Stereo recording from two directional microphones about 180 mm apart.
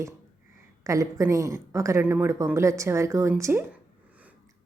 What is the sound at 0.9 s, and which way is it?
A woman's voice, 20° right (ahead or behind).